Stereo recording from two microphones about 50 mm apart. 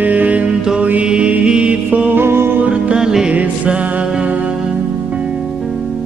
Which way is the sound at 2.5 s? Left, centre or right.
Right.